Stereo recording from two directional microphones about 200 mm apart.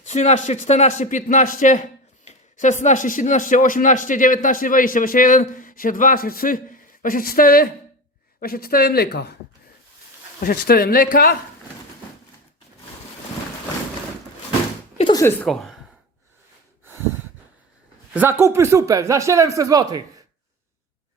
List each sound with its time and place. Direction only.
0.0 s speech: 35° left (ahead or behind); by 9.3 s 50° left (ahead or behind)
10.4 s speech: 50° left (ahead or behind)
14.9 s a sound: 20° left (ahead or behind); by 15.7 s 5° left (ahead or behind)
18.1 s speech: 10° right (ahead or behind)